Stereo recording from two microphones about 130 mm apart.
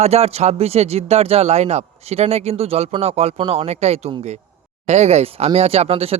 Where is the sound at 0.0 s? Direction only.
55° right (ahead or behind).